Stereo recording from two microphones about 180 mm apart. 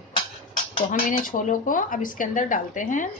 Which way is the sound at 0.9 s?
50° left (ahead or behind).